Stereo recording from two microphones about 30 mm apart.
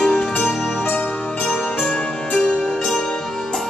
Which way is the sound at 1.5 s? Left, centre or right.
Left.